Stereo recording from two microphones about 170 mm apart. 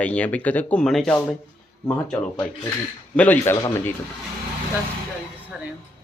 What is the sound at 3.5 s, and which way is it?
Speech, 20° left (ahead or behind).